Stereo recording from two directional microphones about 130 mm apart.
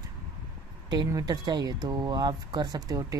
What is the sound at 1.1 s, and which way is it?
Speech, 30° right (ahead or behind).